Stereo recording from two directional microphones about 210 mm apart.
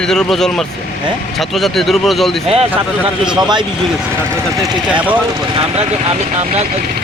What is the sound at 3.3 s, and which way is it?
Speech, 20° right (ahead or behind).